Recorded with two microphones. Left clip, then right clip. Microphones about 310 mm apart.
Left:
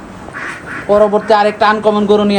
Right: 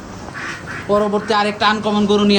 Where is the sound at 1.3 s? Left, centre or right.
Centre.